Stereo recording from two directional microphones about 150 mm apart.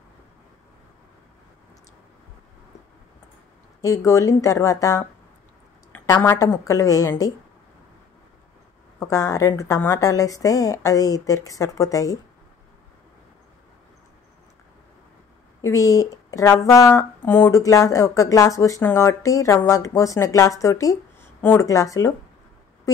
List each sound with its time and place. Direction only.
3.8 s speech: 20° left (ahead or behind)
6.1 s a woman's voice: 15° left (ahead or behind)
9.0 s speech: 25° left (ahead or behind)
15.6 s speech: 20° left (ahead or behind)